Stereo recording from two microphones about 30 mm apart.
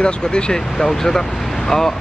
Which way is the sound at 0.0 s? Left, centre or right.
Left.